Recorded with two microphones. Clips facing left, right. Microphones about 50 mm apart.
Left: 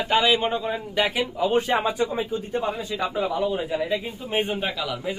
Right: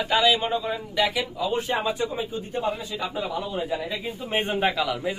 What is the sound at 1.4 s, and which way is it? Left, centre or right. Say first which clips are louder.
Speech: left 6 dB; left.